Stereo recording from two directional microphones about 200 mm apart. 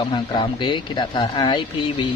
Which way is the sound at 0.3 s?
25° left (ahead or behind).